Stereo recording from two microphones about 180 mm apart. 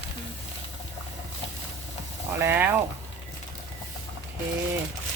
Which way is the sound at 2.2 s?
15° right (ahead or behind).